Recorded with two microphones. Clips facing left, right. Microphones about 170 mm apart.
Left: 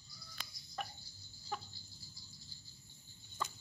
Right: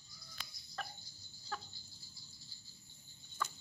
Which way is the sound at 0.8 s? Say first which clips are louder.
Left 2 dB; 15° left (ahead or behind).